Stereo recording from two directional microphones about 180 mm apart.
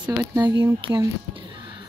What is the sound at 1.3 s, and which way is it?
Music, 25° right (ahead or behind).